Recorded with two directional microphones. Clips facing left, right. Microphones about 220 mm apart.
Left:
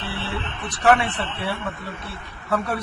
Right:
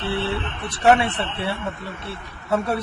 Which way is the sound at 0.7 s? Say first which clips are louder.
Right 2 dB; 25° right (ahead or behind).